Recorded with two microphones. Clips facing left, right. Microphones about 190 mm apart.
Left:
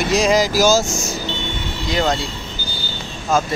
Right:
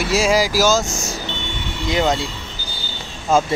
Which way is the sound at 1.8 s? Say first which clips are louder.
Right 1 dB; 20° right (ahead or behind).